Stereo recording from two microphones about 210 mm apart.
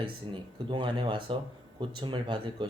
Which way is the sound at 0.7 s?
20° right (ahead or behind).